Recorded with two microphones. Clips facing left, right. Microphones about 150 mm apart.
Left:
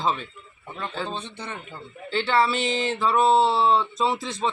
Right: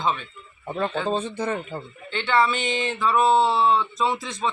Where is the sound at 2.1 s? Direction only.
30° left (ahead or behind).